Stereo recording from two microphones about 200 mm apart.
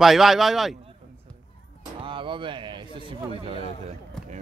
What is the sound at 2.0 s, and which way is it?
A man's voice, 25° right (ahead or behind).